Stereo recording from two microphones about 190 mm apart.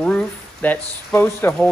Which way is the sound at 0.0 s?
5° left (ahead or behind).